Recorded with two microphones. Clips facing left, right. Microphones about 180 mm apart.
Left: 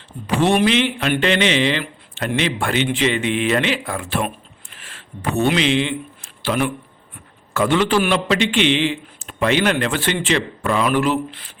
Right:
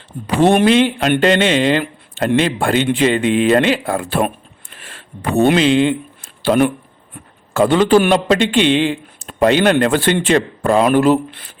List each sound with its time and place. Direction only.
0.4 s speech: 50° right (ahead or behind); by 4.2 s 35° right (ahead or behind)
5.4 s speech: 50° right (ahead or behind)